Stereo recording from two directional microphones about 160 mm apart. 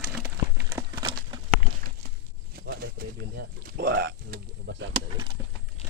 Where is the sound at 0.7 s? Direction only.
20° right (ahead or behind).